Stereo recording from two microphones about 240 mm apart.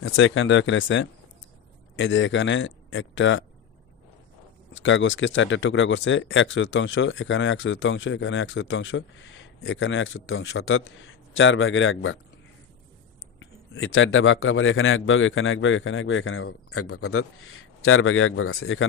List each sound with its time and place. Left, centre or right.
0.0 s speech: left
4.7 s speech: left
13.4 s speech: left